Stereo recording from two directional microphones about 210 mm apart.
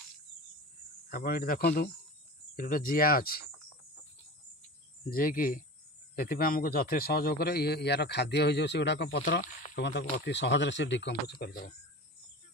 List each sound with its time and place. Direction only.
1.1 s a man's voice: 45° left (ahead or behind)
5.1 s a man's voice: 40° left (ahead or behind)
9.2 s speech: 40° left (ahead or behind)